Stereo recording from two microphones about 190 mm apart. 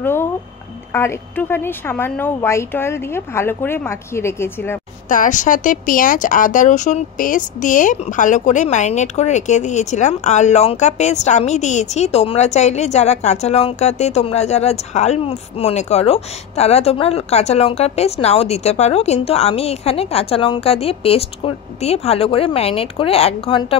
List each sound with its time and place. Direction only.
0.0 s music: 10° left (ahead or behind)
0.9 s a woman's voice: 10° left (ahead or behind)
5.1 s speech: 40° left (ahead or behind)